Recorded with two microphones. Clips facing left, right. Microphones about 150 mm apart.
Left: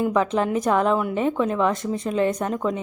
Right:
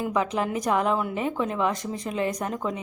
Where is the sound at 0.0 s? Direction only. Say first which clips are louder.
Left 5 dB; 30° left (ahead or behind).